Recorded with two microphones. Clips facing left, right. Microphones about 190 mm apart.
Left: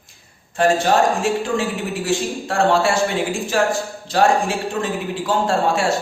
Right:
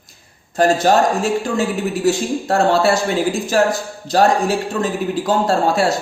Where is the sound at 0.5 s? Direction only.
40° right (ahead or behind).